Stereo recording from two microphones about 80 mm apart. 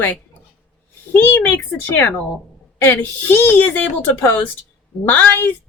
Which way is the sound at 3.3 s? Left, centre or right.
Left.